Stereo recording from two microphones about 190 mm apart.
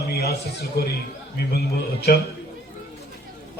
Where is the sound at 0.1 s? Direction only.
55° left (ahead or behind).